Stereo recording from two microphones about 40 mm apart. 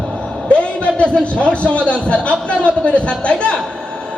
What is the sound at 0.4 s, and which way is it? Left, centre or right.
A man's voice, left.